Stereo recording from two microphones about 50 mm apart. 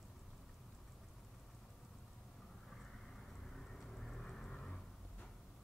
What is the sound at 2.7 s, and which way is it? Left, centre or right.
Vehicle, centre.